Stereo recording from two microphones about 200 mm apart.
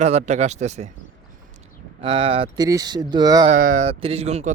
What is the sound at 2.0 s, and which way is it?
Speech, 25° right (ahead or behind).